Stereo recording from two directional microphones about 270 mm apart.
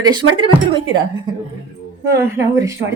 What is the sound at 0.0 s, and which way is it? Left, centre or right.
Speech, centre.